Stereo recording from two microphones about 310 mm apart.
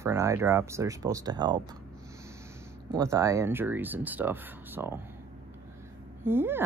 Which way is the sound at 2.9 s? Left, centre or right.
Centre.